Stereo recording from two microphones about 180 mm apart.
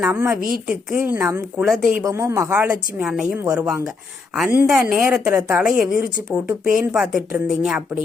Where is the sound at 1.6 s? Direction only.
Centre (ahead or behind).